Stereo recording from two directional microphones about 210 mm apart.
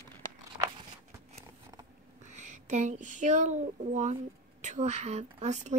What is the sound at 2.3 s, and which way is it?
A woman's voice, 35° right (ahead or behind).